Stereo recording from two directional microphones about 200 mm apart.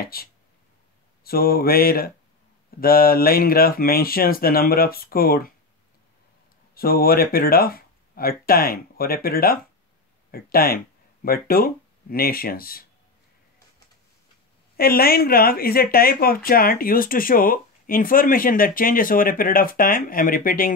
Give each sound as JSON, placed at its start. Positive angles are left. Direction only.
{"t": 0.0, "sound": "speech", "side_deg": 50}
{"t": 6.7, "sound": "speech", "side_deg": 50}
{"t": 14.8, "sound": "speech", "side_deg": 50}